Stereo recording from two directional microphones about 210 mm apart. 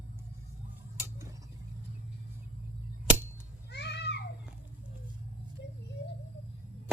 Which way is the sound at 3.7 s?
55° left (ahead or behind).